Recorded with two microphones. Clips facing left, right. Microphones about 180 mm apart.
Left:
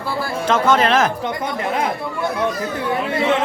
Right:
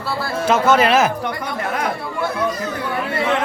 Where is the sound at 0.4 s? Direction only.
10° right (ahead or behind).